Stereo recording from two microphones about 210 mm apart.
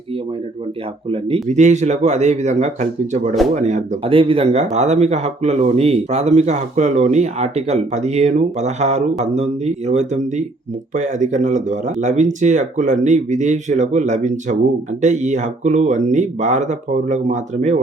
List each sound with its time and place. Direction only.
1.1 s speech: 30° right (ahead or behind)